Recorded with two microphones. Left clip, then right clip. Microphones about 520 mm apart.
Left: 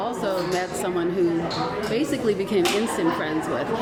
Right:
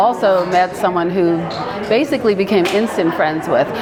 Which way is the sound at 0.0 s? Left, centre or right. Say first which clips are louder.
Right 12 dB; right.